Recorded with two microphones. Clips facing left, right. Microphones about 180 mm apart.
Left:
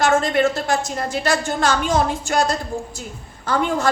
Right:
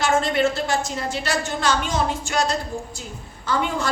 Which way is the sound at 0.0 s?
50° left (ahead or behind).